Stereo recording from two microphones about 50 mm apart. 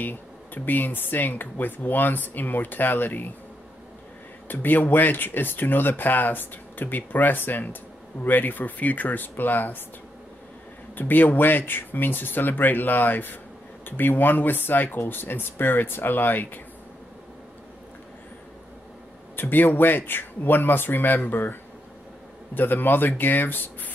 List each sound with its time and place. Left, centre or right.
0.7 s speech: left
4.5 s speech: left
11.0 s speech: left
19.3 s speech: left